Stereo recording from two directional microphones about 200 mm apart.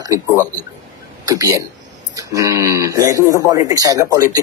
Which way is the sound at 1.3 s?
15° right (ahead or behind).